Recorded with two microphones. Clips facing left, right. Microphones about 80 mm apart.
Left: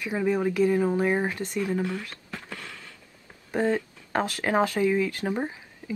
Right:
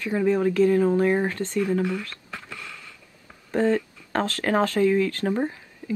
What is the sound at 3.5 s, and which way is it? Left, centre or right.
Speech, centre.